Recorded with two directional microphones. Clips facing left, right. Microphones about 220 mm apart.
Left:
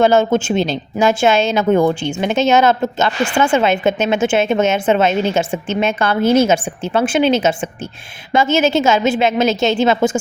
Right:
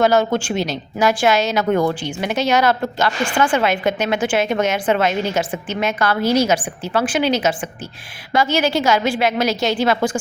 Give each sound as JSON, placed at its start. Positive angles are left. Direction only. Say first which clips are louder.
{"t": 0.0, "sound": "a woman's voice", "louder": "left 3 dB", "side_deg": 25}